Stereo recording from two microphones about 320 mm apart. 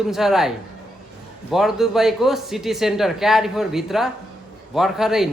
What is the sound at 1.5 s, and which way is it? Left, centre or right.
A man's voice, centre.